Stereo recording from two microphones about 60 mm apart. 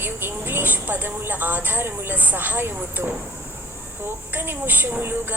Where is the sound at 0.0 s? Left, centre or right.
Right.